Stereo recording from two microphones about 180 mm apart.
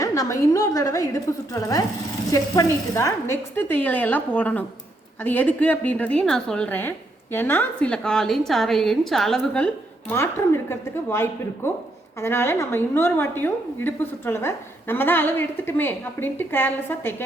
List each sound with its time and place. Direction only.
0.0 s a woman's voice: 15° left (ahead or behind)
10.1 s a woman's voice: 15° left (ahead or behind)